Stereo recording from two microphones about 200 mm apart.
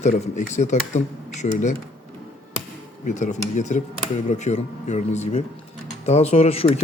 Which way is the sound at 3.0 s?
40° left (ahead or behind).